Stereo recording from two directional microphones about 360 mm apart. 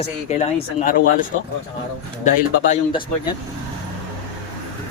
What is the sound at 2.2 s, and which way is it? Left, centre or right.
A man's voice, centre.